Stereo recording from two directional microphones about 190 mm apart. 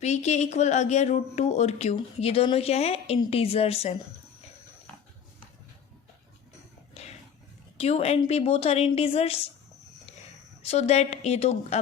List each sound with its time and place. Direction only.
0.0 s speech: 35° left (ahead or behind)
7.8 s speech: 35° left (ahead or behind)
10.6 s speech: 35° left (ahead or behind)